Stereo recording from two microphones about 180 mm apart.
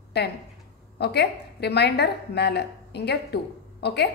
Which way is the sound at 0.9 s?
65° left (ahead or behind).